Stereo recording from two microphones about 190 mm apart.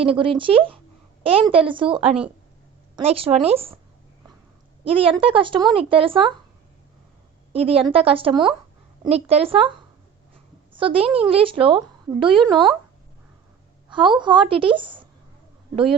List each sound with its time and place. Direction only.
0.0 s a woman's voice: 30° right (ahead or behind)
4.9 s a woman's voice: 30° right (ahead or behind)
7.5 s a woman's voice: 30° right (ahead or behind)
10.8 s a woman's voice: 30° right (ahead or behind)
13.9 s a woman's voice: 25° right (ahead or behind)